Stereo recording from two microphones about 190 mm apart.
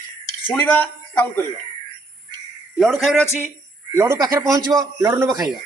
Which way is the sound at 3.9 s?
15° right (ahead or behind).